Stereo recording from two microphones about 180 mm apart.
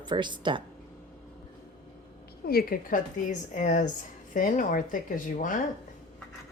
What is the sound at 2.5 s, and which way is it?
A woman's voice, 55° left (ahead or behind).